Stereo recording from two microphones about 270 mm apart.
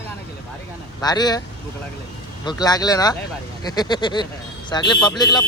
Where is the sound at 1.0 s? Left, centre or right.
Centre.